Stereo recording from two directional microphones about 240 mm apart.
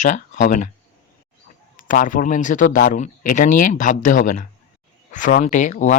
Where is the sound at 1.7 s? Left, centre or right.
Left.